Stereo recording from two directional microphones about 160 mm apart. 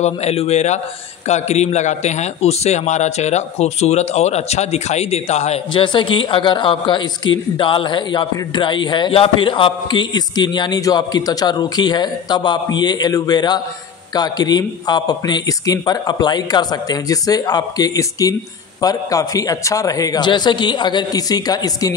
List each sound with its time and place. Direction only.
0.0 s a man's voice: 40° left (ahead or behind); by 21.9 s 25° left (ahead or behind)